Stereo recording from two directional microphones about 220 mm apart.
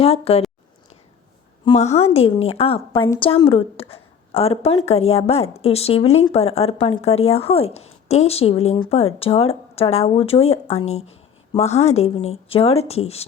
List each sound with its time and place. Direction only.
0.0 s speech: 25° left (ahead or behind)
1.6 s speech: 25° left (ahead or behind)